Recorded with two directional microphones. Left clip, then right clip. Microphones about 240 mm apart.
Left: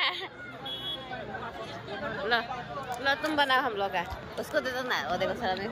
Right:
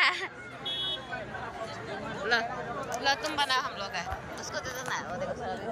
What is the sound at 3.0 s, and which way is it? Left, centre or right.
Speech, centre.